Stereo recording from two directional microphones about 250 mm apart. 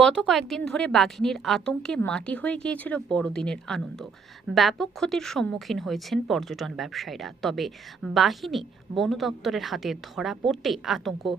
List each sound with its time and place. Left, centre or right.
0.0 s a woman's voice: centre